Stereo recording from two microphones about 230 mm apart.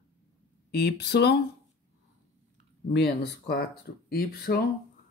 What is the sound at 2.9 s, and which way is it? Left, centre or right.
Speech, left.